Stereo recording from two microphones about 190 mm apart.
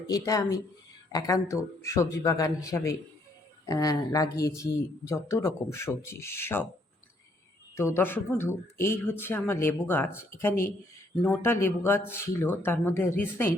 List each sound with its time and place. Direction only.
0.1 s speech: 20° left (ahead or behind)
7.8 s speech: 10° left (ahead or behind)